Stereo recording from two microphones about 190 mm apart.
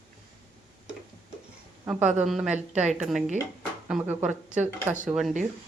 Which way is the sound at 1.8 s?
5° right (ahead or behind).